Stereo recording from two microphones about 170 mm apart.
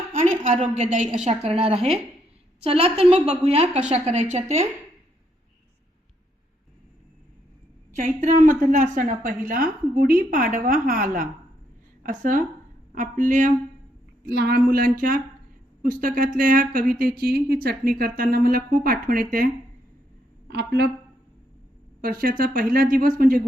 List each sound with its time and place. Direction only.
0.4 s a woman's voice: 40° right (ahead or behind)
8.0 s a woman's voice: 45° right (ahead or behind)
14.3 s speech: 70° right (ahead or behind); by 19.5 s 55° right (ahead or behind)
20.5 s speech: 75° right (ahead or behind)
22.0 s speech: 55° right (ahead or behind)